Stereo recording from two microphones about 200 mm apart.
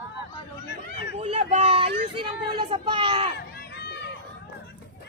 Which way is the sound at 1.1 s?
30° right (ahead or behind).